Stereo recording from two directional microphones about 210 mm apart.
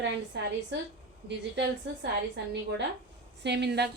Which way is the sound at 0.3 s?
55° right (ahead or behind).